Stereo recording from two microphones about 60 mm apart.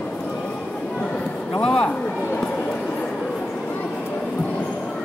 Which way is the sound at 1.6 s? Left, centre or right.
Centre.